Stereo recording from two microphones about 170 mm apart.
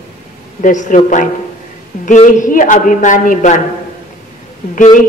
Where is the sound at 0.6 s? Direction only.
45° left (ahead or behind).